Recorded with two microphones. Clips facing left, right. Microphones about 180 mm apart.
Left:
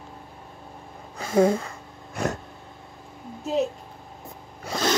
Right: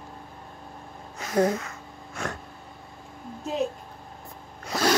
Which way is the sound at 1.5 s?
30° left (ahead or behind).